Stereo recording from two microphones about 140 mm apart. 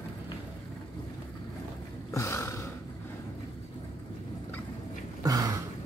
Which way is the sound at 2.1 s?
20° left (ahead or behind).